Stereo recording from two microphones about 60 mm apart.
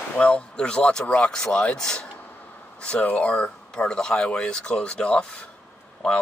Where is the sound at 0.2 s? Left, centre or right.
Centre.